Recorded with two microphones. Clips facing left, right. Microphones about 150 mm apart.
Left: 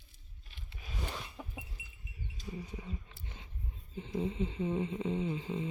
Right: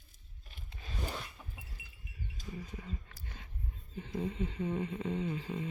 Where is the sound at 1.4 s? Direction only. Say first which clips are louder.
Left 6 dB; 80° left.